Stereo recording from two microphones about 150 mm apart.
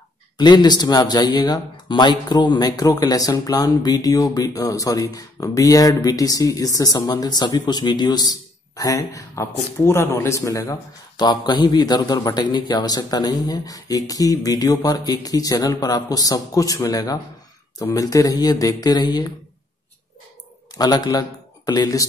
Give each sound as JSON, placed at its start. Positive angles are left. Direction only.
{"t": 0.4, "sound": "speech", "side_deg": 30}
{"t": 20.7, "sound": "speech", "side_deg": 25}